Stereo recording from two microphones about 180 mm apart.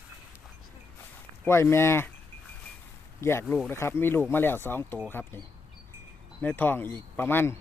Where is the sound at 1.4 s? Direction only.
15° left (ahead or behind).